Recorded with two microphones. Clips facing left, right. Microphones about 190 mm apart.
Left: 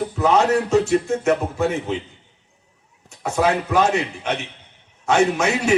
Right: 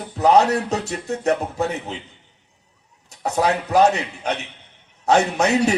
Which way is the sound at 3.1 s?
40° right (ahead or behind).